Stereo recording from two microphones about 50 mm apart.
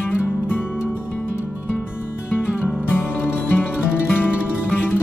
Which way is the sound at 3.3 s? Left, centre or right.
Left.